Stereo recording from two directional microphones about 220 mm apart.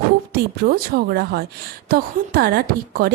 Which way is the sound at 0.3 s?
45° right (ahead or behind).